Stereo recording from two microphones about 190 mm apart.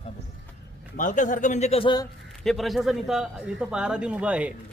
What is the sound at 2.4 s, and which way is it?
A man's voice, centre (ahead or behind).